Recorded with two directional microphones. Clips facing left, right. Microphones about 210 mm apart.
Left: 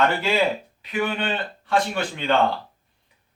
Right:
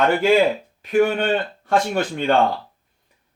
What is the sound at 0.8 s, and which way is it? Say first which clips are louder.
Speech: right 8 dB; 45° right (ahead or behind).